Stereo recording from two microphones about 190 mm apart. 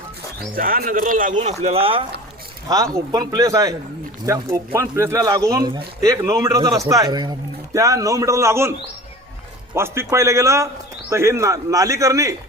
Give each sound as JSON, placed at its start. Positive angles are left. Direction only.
{"t": 0.3, "sound": "speech", "side_deg": -50}
{"t": 2.6, "sound": "a man's voice", "side_deg": -20}
{"t": 9.7, "sound": "a man's voice", "side_deg": -15}